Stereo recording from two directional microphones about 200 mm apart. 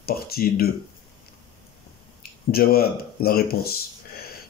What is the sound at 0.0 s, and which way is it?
Speech, 50° left (ahead or behind).